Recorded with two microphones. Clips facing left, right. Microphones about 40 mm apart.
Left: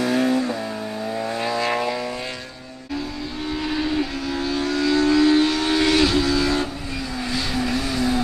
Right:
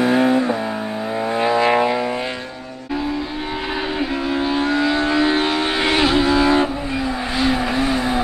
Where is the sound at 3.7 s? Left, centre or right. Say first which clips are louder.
Right 2 dB; right.